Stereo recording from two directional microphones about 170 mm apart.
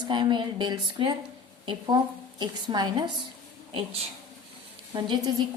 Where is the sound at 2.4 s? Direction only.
25° right (ahead or behind).